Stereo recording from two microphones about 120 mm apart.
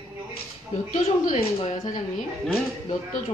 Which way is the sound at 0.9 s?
90° left.